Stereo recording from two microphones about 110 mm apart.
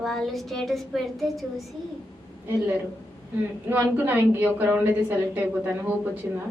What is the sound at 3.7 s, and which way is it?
A woman's voice, 15° right (ahead or behind).